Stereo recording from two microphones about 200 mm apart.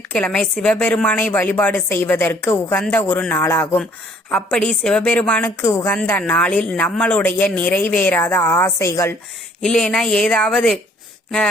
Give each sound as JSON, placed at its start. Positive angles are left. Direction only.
{"t": 0.1, "sound": "speech", "side_deg": 5}
{"t": 9.6, "sound": "speech", "side_deg": 5}